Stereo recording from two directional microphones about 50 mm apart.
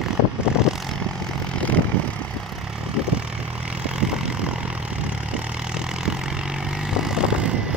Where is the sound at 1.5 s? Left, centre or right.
Left.